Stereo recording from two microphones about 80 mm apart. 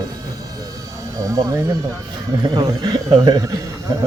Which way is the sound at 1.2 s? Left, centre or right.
Right.